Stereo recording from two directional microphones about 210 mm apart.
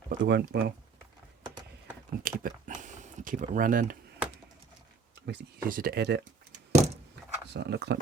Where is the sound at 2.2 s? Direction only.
40° right (ahead or behind).